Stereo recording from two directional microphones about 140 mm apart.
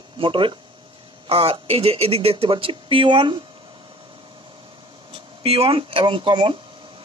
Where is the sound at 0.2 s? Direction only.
35° right (ahead or behind).